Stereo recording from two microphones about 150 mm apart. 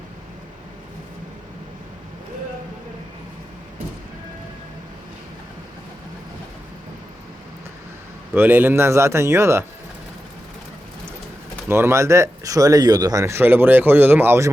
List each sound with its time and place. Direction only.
8.3 s a man's voice: 15° right (ahead or behind)
11.7 s speech: 15° right (ahead or behind)